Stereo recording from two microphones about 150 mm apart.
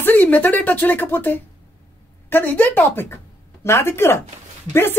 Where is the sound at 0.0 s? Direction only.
10° left (ahead or behind).